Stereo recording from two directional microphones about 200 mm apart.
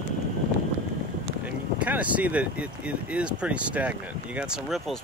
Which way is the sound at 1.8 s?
5° right (ahead or behind).